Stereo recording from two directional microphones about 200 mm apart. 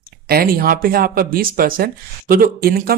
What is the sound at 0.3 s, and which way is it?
Speech, 45° right (ahead or behind).